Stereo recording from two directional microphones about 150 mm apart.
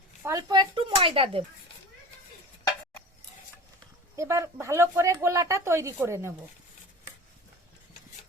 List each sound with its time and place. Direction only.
0.2 s speech: 20° right (ahead or behind); by 1.5 s 35° right (ahead or behind)
4.2 s a woman's voice: 20° right (ahead or behind)